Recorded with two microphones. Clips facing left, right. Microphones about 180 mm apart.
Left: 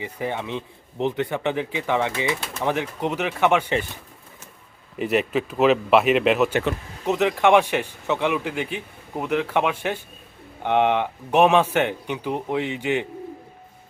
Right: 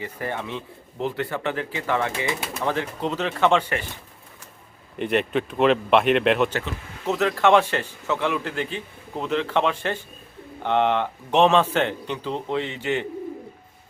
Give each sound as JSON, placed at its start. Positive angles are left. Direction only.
{"t": 0.0, "sound": "a man's voice", "side_deg": 15}
{"t": 4.9, "sound": "speech", "side_deg": 5}
{"t": 7.0, "sound": "a man's voice", "side_deg": 15}